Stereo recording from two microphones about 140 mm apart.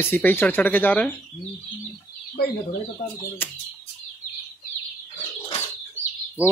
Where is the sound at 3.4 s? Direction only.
15° left (ahead or behind).